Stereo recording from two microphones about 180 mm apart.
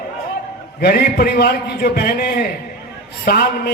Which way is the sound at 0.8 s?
55° left (ahead or behind).